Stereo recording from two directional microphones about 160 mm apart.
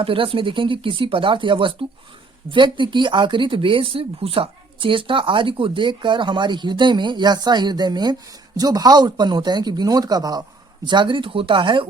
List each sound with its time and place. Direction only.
0.0 s speech: 35° right (ahead or behind)